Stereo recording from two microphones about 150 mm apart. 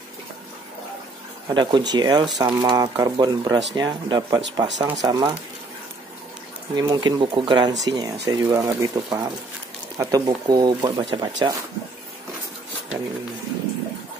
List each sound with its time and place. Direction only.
1.5 s speech: 30° right (ahead or behind)
6.7 s speech: 25° right (ahead or behind)